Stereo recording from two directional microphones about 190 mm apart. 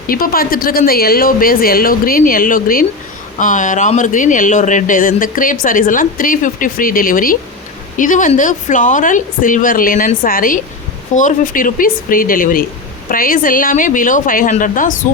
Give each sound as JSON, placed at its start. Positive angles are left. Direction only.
{"t": 0.1, "sound": "speech", "side_deg": 50}